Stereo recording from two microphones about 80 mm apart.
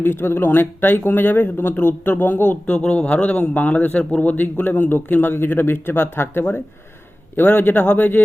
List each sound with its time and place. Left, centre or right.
0.0 s speech: left